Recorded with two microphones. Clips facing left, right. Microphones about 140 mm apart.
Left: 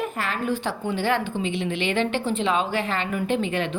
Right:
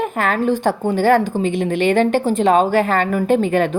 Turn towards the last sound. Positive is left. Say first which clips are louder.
# right 9 dB
turn(degrees=-45)  # may be behind; listen again after turning